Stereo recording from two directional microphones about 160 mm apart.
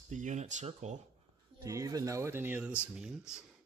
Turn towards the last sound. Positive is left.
turn(degrees=-5)  # may be behind; listen again after turning